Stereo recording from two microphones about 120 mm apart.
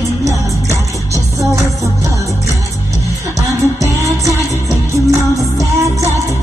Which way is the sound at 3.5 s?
25° right (ahead or behind).